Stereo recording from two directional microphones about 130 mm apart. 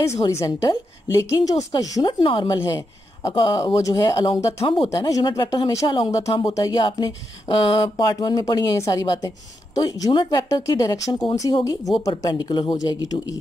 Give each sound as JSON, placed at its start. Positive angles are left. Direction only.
{"t": 0.3, "sound": "speech", "side_deg": 25}
{"t": 5.0, "sound": "speech", "side_deg": 30}
{"t": 6.4, "sound": "speech", "side_deg": 30}